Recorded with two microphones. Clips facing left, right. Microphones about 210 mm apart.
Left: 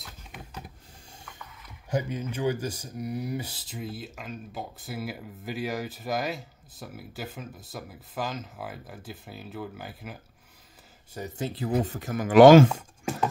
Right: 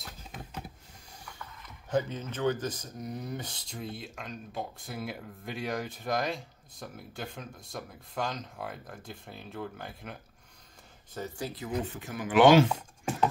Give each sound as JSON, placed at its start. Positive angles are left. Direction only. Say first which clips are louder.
{"t": 1.7, "sound": "speech", "louder": "even", "side_deg": 10}
{"t": 11.1, "sound": "speech", "louder": "left 4 dB", "side_deg": 20}